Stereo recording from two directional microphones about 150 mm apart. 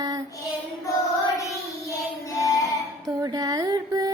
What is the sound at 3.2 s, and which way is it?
Carnatic music, 25° right (ahead or behind).